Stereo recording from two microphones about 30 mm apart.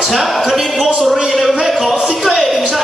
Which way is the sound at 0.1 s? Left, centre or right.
Centre.